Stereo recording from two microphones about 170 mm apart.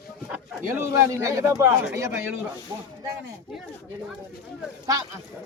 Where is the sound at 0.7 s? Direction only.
15° right (ahead or behind).